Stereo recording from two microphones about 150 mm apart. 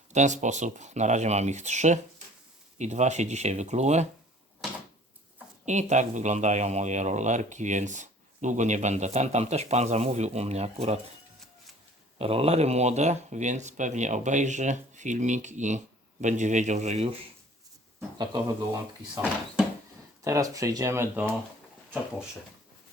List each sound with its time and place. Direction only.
0.1 s speech: 55° right (ahead or behind)
5.6 s speech: 50° right (ahead or behind)
12.2 s speech: 40° right (ahead or behind)
18.2 s speech: 25° right (ahead or behind)
20.2 s speech: 20° right (ahead or behind)